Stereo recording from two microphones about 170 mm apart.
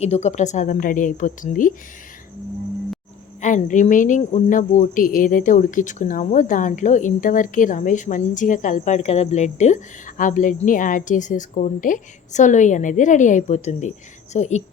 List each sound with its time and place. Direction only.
0.0 s speech: 40° left (ahead or behind)
3.4 s speech: 45° left (ahead or behind)